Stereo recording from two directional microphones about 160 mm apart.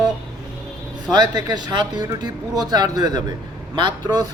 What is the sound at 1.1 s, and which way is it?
Speech, 25° right (ahead or behind).